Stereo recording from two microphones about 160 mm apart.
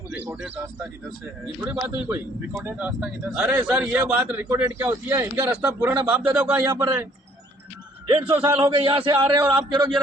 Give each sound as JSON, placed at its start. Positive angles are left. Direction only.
{"t": 0.1, "sound": "speech", "side_deg": -5}
{"t": 1.6, "sound": "a man's voice", "side_deg": -15}
{"t": 8.2, "sound": "speech", "side_deg": -10}
{"t": 8.6, "sound": "a man's voice", "side_deg": -35}